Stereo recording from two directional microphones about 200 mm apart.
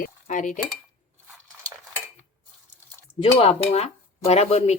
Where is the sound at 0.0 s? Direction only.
40° left (ahead or behind).